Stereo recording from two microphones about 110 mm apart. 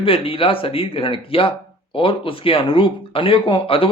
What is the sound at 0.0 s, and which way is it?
Speech, 55° left (ahead or behind).